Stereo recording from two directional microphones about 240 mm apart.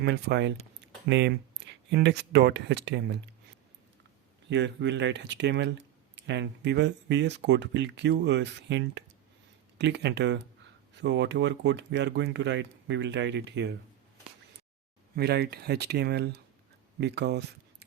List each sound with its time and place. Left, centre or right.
0.0 s speech: right
4.4 s speech: right
15.1 s speech: right